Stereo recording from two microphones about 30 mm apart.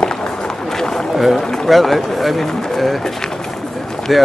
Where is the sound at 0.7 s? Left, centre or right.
Centre.